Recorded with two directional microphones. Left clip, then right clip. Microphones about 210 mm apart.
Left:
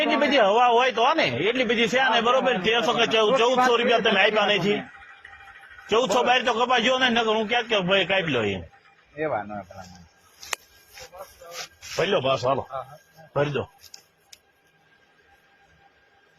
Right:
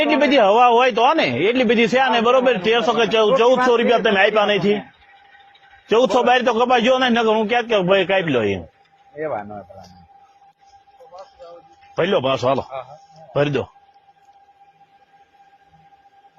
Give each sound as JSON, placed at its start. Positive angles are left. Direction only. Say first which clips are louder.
{"t": 0.2, "sound": "a man's voice", "louder": "right 6 dB", "side_deg": -50}
{"t": 5.9, "sound": "a man's voice", "louder": "right 6 dB", "side_deg": -55}
{"t": 9.1, "sound": "speech", "louder": "right 2 dB", "side_deg": -20}
{"t": 11.9, "sound": "speech", "louder": "right 4 dB", "side_deg": -40}
{"t": 13.3, "sound": "a man's voice", "louder": "right 5 dB", "side_deg": -55}